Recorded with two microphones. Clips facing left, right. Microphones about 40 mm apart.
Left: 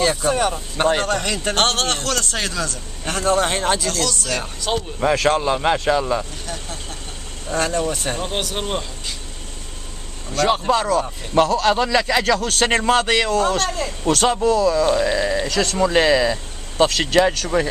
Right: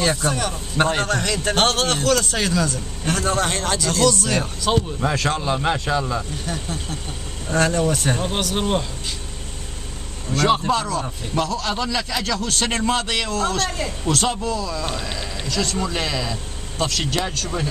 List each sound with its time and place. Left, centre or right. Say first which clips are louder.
0.0 s a man's voice: left 1 dB; centre
0.3 s speech: left 5 dB; left
0.9 s a man's voice: left 1 dB; centre
3.9 s a man's voice: right 4 dB; centre
5.4 s speech: left 3 dB; centre
5.9 s speech: left 4 dB; left
6.4 s a man's voice: right 3 dB; centre
10.3 s a man's voice: even; centre
11.3 s a man's voice: left 7 dB; left
12.6 s a man's voice: left 6 dB; left
13.7 s a man's voice: left 2 dB; centre
14.0 s a man's voice: left 6 dB; left